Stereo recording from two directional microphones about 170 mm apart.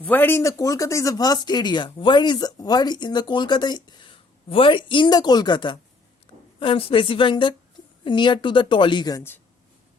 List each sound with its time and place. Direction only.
0.0 s a woman's voice: 10° left (ahead or behind)